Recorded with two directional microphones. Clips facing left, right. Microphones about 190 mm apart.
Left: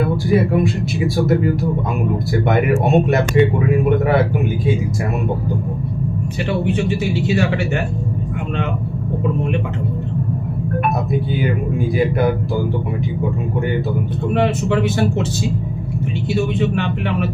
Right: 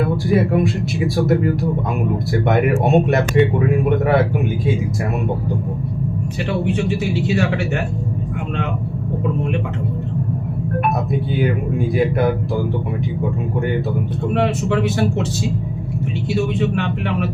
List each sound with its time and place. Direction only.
0.0 s speech: centre (ahead or behind)
10.8 s speech: centre (ahead or behind)